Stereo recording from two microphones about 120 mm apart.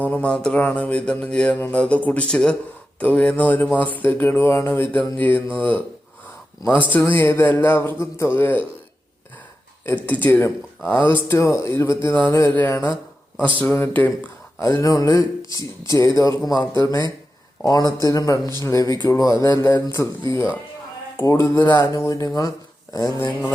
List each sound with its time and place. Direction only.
0.0 s mantra: 10° left (ahead or behind)
6.9 s speech: 15° left (ahead or behind)
9.8 s mantra: 15° left (ahead or behind)
10.8 s speech: 15° left (ahead or behind)
13.6 s mantra: 15° left (ahead or behind)
14.6 s speech: 25° left (ahead or behind)